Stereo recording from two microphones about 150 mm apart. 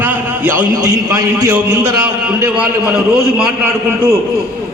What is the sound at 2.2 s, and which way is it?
A man's voice, 10° right (ahead or behind).